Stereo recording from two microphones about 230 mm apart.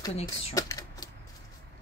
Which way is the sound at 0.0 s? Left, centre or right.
Left.